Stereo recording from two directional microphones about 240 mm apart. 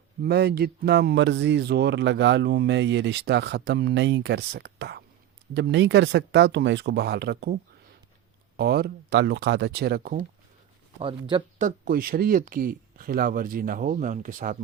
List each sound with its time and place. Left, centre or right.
0.2 s speech: right
11.0 s speech: right
11.6 s speech: right